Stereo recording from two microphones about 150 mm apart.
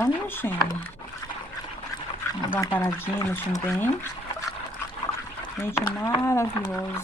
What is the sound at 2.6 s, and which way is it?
Speech, 20° left (ahead or behind).